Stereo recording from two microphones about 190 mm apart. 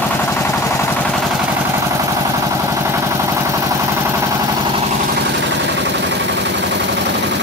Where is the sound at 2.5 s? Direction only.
15° right (ahead or behind).